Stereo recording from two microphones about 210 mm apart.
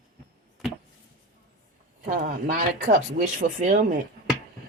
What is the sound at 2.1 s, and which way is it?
A woman's voice, 40° right (ahead or behind).